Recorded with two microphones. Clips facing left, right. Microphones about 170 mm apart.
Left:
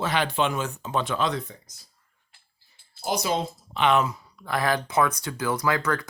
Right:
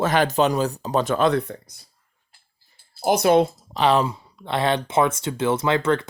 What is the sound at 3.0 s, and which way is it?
Speech, 60° right (ahead or behind).